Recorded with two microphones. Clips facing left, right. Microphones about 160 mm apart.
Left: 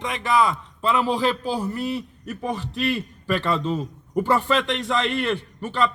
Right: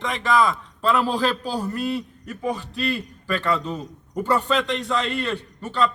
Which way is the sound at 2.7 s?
20° left (ahead or behind).